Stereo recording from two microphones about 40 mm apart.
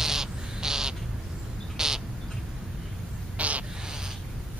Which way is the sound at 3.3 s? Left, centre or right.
Right.